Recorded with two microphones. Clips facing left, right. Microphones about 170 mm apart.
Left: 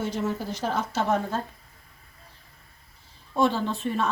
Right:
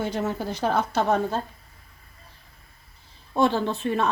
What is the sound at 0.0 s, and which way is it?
Speech, 60° right (ahead or behind).